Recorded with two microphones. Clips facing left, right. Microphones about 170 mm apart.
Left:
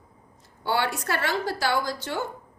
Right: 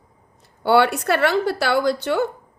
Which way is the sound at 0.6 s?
65° right (ahead or behind).